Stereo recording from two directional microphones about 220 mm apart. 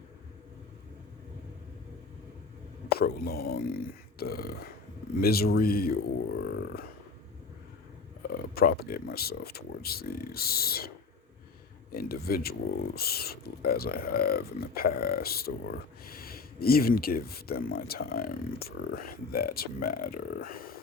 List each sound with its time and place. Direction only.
3.0 s speech: 45° left (ahead or behind)
6.4 s a sound: 50° left (ahead or behind)
8.3 s speech: 40° left (ahead or behind)